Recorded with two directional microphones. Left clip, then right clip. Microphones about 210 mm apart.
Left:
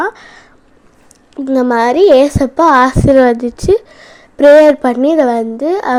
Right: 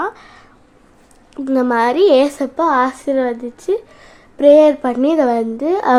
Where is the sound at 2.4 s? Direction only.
25° left (ahead or behind).